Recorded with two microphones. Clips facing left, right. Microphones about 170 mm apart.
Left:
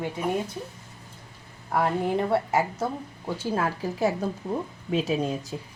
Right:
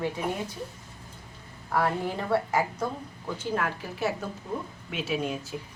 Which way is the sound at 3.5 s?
35° left (ahead or behind).